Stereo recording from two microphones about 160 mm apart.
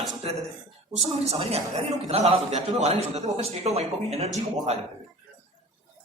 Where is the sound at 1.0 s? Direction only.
40° right (ahead or behind).